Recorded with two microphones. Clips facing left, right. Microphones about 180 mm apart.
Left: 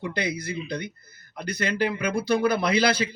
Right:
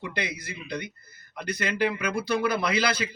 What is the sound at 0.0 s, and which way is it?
A man's voice, 35° left (ahead or behind).